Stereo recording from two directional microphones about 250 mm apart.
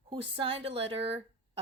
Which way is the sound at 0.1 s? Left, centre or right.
Right.